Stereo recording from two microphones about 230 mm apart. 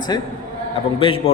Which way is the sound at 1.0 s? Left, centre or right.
Left.